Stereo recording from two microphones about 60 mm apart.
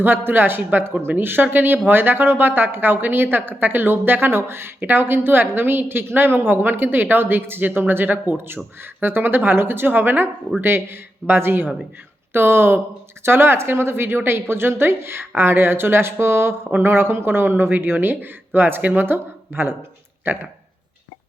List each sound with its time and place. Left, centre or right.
0.0 s speech: right